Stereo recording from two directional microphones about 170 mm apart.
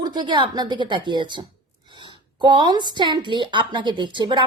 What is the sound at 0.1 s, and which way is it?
A woman's voice, 25° right (ahead or behind).